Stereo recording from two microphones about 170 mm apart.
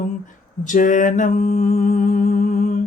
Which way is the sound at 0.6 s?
50° left (ahead or behind).